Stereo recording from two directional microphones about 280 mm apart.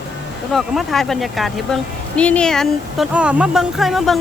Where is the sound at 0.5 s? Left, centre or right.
Centre.